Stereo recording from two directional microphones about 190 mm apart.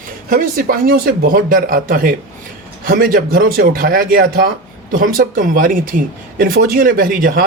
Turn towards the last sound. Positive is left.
turn(degrees=-50)  # may be behind; listen again after turning